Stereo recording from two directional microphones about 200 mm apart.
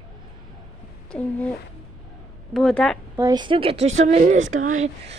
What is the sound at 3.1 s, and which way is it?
Speech, 20° right (ahead or behind).